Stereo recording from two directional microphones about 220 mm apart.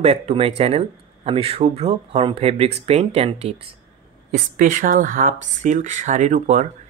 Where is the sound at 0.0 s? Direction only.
25° right (ahead or behind).